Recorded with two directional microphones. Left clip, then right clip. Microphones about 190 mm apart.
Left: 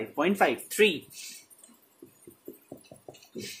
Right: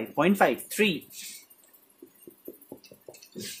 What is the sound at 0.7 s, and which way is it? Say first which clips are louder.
Speech: left 3 dB; 25° right (ahead or behind).